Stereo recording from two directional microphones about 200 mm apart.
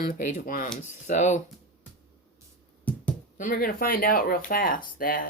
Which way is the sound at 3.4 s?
45° left (ahead or behind).